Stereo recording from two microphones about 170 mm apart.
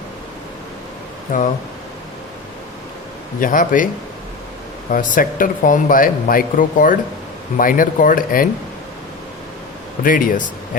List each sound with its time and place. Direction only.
1.3 s speech: 55° left (ahead or behind)
3.4 s speech: 50° left (ahead or behind)
4.9 s speech: 50° left (ahead or behind)
10.0 s speech: 55° left (ahead or behind)